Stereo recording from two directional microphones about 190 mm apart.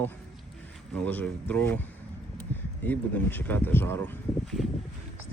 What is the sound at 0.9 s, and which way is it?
Speech, 10° left (ahead or behind).